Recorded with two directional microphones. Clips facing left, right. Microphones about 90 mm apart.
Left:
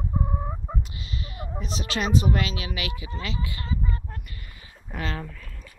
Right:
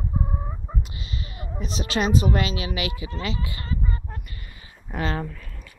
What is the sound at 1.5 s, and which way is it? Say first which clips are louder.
Speech: right 4 dB; 25° right (ahead or behind).